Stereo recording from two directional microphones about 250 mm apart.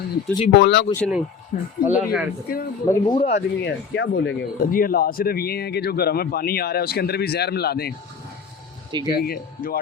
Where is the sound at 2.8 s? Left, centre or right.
Centre.